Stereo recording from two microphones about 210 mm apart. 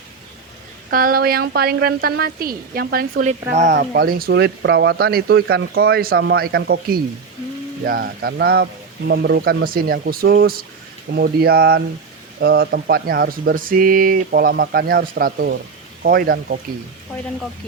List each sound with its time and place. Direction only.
0.9 s speech: 45° right (ahead or behind)